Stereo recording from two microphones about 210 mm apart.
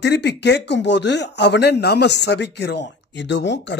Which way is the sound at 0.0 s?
55° left (ahead or behind).